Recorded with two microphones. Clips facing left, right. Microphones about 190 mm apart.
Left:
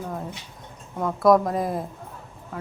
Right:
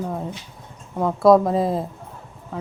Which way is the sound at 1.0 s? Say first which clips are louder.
Right 4 dB; 25° right (ahead or behind).